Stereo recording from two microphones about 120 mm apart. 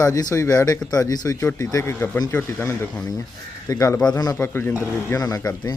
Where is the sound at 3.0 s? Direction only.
30° left (ahead or behind).